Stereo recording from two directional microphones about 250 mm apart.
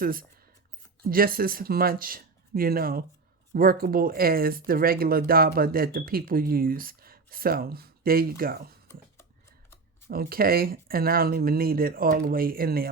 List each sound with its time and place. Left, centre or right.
0.0 s speech: right
10.1 s speech: right